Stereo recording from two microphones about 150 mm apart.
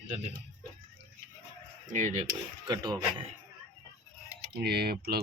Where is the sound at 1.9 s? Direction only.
50° right (ahead or behind).